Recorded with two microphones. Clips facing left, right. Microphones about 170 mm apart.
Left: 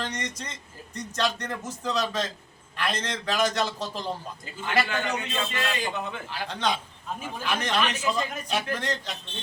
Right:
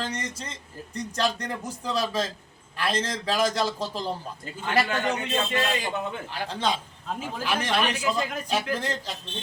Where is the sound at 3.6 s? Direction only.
5° right (ahead or behind).